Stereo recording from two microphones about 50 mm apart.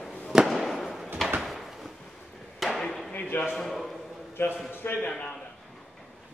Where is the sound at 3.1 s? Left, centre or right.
Left.